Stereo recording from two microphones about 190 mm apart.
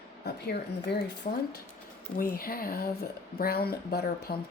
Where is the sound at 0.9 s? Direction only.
60° left (ahead or behind).